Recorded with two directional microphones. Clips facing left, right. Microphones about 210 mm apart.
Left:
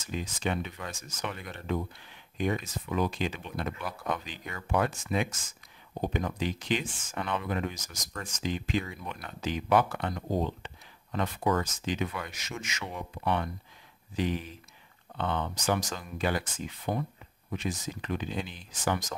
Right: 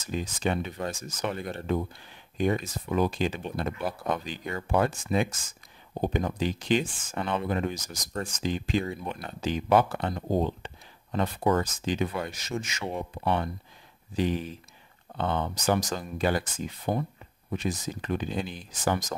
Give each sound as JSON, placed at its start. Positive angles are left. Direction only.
{"t": 0.0, "sound": "speech", "side_deg": -35}